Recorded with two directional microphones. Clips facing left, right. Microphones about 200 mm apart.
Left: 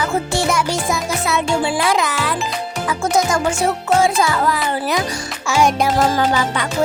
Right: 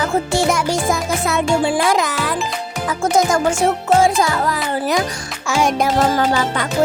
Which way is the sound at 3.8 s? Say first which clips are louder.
Right 1 dB; 45° right (ahead or behind).